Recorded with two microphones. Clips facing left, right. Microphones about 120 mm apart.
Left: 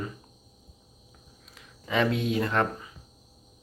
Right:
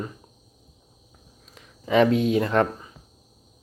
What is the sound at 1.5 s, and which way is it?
Speech, 40° right (ahead or behind).